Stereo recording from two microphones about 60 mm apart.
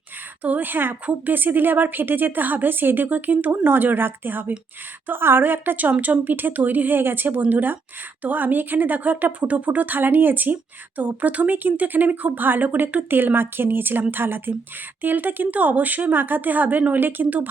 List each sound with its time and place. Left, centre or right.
0.4 s speech: right